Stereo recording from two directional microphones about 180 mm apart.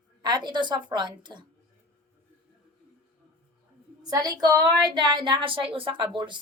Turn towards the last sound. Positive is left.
turn(degrees=-25)  # may be behind; listen again after turning